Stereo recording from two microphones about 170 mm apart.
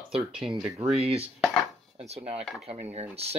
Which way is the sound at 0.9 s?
35° right (ahead or behind).